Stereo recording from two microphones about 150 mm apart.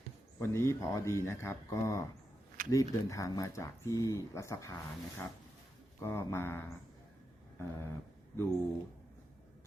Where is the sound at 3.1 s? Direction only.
20° left (ahead or behind).